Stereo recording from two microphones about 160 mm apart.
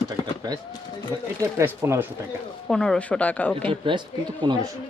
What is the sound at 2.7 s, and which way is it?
Speech, 5° left (ahead or behind).